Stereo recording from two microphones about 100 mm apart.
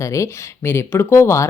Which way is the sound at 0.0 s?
30° left (ahead or behind).